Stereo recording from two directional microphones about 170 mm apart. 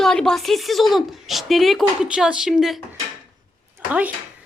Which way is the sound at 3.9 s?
10° right (ahead or behind).